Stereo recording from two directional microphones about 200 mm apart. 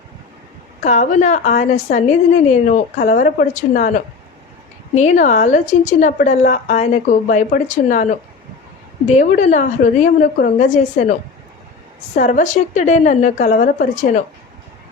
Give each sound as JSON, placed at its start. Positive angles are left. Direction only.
{"t": 0.9, "sound": "a woman's voice", "side_deg": 35}
{"t": 12.1, "sound": "a woman's voice", "side_deg": 40}